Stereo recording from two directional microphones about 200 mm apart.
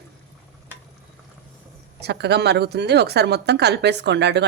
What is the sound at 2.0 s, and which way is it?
Speech, 55° right (ahead or behind).